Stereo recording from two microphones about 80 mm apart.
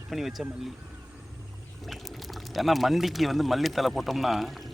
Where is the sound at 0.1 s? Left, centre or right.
Centre.